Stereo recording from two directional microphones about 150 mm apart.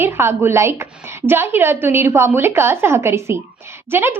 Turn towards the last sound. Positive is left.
turn(degrees=-15)  # may be behind; listen again after turning